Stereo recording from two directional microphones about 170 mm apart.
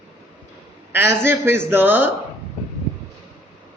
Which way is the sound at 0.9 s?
15° right (ahead or behind).